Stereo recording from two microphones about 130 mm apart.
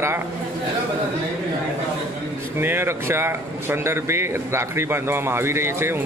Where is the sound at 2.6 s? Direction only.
15° right (ahead or behind).